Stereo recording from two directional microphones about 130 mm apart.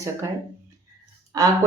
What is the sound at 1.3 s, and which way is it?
Speech, 30° right (ahead or behind).